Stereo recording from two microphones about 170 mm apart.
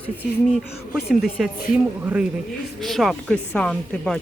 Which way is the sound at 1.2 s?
5° right (ahead or behind).